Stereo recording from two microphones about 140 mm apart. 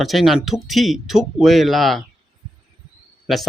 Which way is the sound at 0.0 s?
Centre (ahead or behind).